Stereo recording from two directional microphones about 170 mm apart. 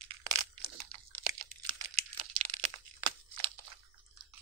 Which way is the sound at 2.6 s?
30° right (ahead or behind).